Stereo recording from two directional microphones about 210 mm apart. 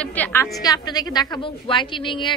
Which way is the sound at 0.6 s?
20° left (ahead or behind).